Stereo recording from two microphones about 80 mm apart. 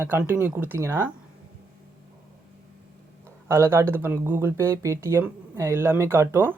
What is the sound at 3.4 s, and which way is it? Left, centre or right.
Speech, right.